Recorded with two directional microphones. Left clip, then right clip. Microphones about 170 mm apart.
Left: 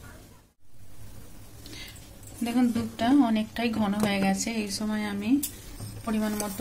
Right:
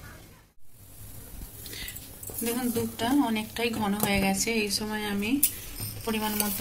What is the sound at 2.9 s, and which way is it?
A woman's voice, 65° left (ahead or behind).